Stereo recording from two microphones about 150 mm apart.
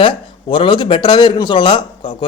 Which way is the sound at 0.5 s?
35° left (ahead or behind).